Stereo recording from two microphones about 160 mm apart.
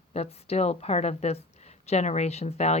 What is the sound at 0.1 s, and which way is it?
A woman's voice, 40° left (ahead or behind).